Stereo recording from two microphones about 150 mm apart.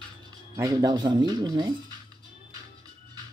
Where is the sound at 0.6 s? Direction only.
25° right (ahead or behind).